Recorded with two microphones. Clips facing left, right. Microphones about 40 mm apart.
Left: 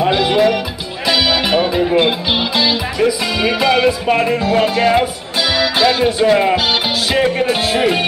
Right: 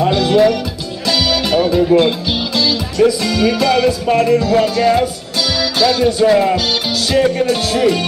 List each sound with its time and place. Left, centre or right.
0.0 s music: left
1.0 s speech: left
5.6 s music: left